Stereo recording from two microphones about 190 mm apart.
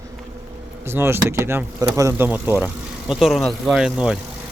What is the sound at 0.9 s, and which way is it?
Speech, 10° right (ahead or behind).